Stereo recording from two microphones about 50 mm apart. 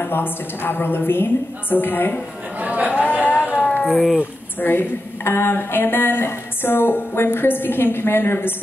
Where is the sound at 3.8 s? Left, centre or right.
Centre.